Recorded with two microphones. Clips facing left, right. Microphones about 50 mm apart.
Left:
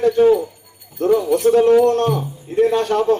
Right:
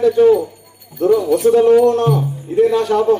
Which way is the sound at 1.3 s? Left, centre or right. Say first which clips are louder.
Right 1 dB; left.